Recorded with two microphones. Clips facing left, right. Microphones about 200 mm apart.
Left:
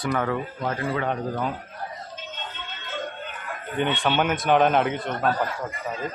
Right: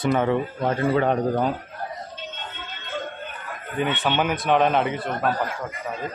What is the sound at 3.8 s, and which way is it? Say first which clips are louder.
A man's voice: even; 5° right (ahead or behind).